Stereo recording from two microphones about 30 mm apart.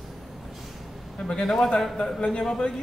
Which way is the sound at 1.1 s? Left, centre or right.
Left.